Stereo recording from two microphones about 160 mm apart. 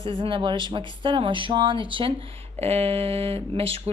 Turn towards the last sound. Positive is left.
turn(degrees=-35)  # may be behind; listen again after turning